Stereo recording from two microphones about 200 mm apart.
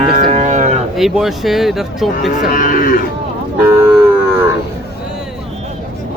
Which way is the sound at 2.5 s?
45° left (ahead or behind).